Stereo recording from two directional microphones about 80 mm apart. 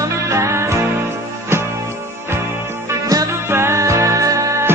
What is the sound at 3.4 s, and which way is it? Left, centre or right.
Music, right.